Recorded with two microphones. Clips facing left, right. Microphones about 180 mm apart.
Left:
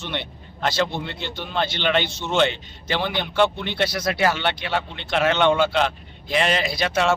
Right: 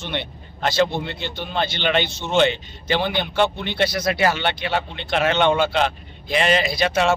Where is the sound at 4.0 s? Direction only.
5° right (ahead or behind).